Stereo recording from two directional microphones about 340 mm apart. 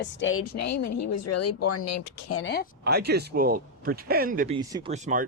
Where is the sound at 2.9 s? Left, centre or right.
Right.